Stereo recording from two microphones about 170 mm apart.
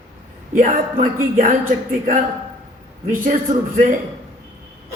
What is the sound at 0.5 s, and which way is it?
Speech, 50° right (ahead or behind).